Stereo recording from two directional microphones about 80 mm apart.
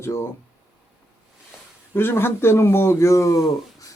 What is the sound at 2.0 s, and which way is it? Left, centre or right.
A man's voice, left.